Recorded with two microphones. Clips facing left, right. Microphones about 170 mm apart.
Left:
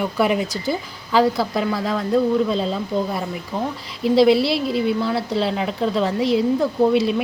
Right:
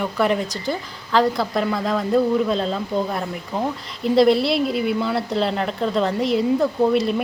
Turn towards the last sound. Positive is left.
turn(degrees=0)  # may be behind; listen again after turning